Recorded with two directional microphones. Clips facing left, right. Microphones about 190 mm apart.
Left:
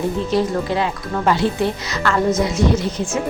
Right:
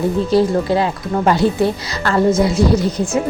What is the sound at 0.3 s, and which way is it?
Speech, 35° right (ahead or behind).